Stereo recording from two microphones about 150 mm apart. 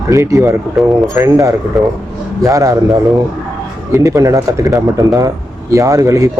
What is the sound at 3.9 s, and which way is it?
Speech, 20° right (ahead or behind).